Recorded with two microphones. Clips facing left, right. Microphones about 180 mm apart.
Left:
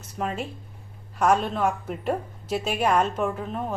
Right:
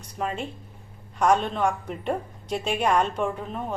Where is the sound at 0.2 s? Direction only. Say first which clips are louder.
Even; centre (ahead or behind).